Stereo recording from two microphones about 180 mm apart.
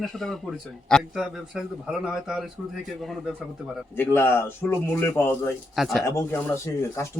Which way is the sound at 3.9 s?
10° left (ahead or behind).